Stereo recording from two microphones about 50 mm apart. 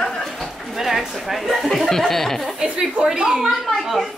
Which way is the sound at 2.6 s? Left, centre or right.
Centre.